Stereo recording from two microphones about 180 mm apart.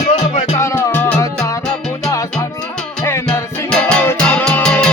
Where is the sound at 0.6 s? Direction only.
15° left (ahead or behind).